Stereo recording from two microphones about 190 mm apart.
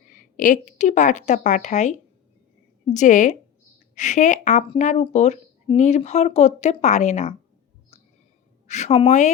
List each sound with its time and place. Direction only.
0.2 s speech: 45° left (ahead or behind)
8.6 s speech: 35° left (ahead or behind)